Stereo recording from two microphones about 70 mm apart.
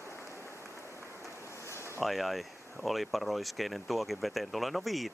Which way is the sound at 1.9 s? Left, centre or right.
Centre.